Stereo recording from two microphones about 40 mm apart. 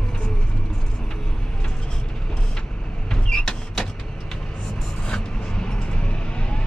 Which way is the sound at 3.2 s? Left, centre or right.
Left.